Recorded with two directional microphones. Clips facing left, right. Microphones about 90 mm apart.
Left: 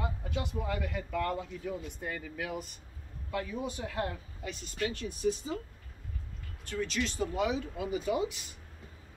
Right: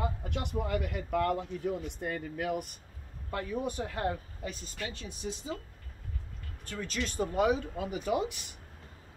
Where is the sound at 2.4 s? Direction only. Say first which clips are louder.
Right 6 dB; 55° right (ahead or behind).